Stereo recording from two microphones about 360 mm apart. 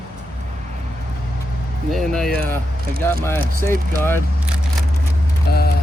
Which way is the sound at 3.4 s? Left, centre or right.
Right.